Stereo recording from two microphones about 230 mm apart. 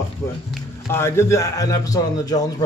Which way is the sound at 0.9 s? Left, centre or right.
Centre.